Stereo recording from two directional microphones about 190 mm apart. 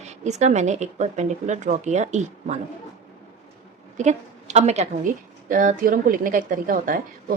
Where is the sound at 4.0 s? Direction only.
35° right (ahead or behind).